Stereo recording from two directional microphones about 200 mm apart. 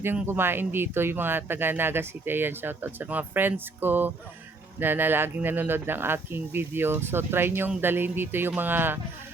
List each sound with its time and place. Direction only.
0.0 s speech: 10° right (ahead or behind)